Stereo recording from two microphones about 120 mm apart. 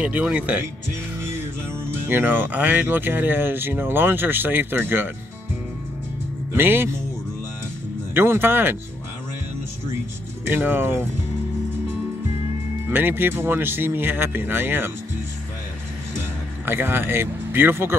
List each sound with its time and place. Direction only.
0.0 s speech: 10° right (ahead or behind)
2.0 s speech: 15° right (ahead or behind)
6.5 s speech: 20° right (ahead or behind)
8.1 s speech: 20° right (ahead or behind)
10.4 s speech: 15° right (ahead or behind)
12.8 s speech: 20° right (ahead or behind)
16.6 s speech: 15° right (ahead or behind)